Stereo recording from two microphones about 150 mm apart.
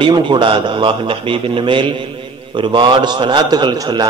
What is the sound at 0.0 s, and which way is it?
A man's voice, 30° right (ahead or behind).